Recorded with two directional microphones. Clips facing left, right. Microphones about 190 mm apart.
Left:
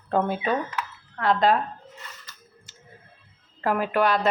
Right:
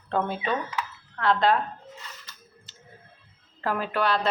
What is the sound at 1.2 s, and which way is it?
Speech, 40° left (ahead or behind).